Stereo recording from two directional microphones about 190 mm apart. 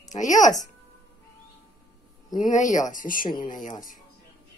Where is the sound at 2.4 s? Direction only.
40° left (ahead or behind).